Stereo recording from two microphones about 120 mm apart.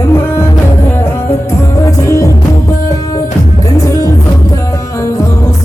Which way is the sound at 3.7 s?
25° left (ahead or behind).